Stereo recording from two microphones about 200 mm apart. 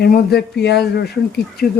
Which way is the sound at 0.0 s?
50° left (ahead or behind).